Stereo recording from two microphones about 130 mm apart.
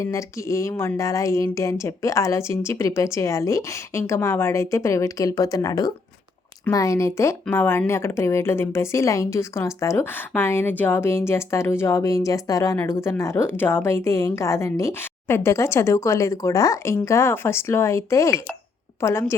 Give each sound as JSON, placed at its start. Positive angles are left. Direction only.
{"t": 0.0, "sound": "a woman's voice", "side_deg": 25}